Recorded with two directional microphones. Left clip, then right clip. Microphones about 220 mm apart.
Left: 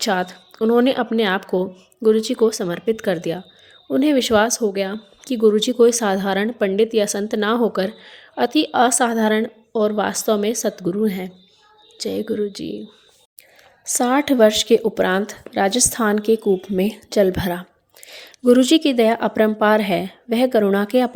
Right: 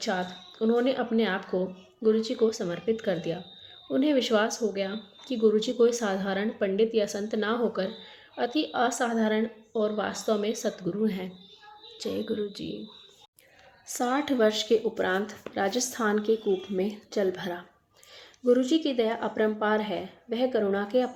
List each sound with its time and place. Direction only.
0.0 s speech: 40° left (ahead or behind)
13.8 s speech: 40° left (ahead or behind)